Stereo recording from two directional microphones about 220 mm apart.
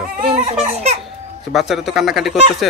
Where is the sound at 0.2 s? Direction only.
25° right (ahead or behind).